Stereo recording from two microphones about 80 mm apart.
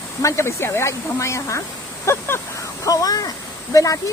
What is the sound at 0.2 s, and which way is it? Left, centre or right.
Speech, left.